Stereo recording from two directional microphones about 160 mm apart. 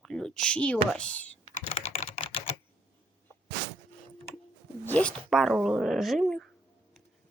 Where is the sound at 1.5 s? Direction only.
45° left (ahead or behind).